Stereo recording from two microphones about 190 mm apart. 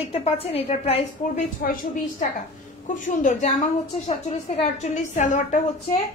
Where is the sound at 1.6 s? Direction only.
45° left (ahead or behind).